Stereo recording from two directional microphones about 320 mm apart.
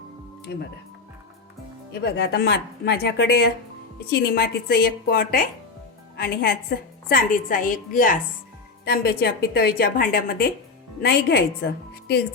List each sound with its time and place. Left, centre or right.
0.5 s speech: left
1.9 s a woman's voice: left